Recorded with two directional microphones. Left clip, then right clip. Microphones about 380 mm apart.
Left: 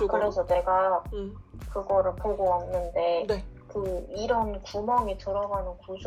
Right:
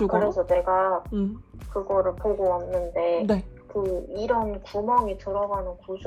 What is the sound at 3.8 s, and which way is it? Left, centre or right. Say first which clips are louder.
Speech: right 4 dB; centre.